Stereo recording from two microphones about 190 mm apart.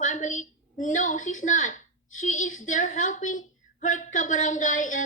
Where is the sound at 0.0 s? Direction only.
40° left (ahead or behind).